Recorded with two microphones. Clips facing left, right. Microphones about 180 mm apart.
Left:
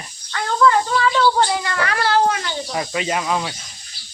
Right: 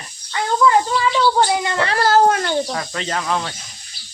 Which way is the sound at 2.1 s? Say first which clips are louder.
Right 4 dB; 45° right (ahead or behind).